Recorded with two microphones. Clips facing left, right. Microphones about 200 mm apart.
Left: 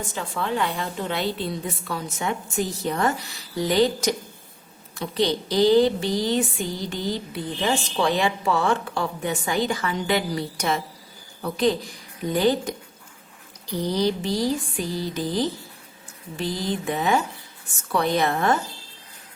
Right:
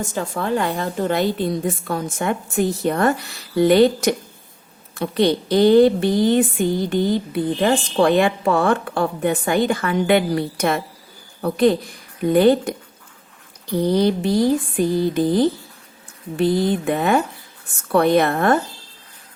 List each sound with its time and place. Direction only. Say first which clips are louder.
0.0 s a woman's voice: right 5 dB; 45° right (ahead or behind)